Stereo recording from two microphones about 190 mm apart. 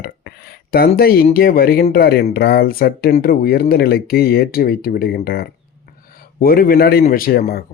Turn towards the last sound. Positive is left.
turn(degrees=50)  # may be behind; listen again after turning